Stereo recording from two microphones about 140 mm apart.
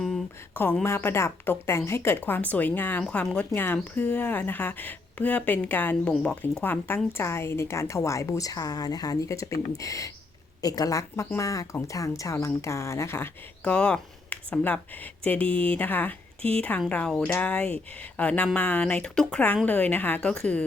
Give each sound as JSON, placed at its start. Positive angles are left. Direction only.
{"t": 0.5, "sound": "a woman's voice", "side_deg": 15}